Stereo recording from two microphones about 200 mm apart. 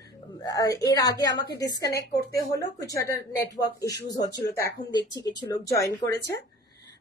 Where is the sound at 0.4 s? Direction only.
15° left (ahead or behind).